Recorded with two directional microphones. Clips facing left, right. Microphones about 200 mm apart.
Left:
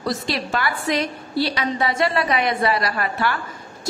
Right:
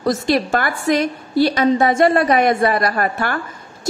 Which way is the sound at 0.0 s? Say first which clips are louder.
Right 7 dB; 50° right (ahead or behind).